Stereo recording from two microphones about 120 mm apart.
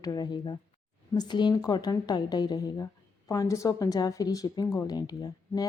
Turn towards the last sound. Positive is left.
turn(degrees=35)  # may be behind; listen again after turning